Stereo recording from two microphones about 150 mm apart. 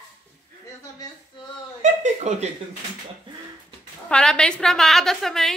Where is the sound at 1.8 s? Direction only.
50° right (ahead or behind).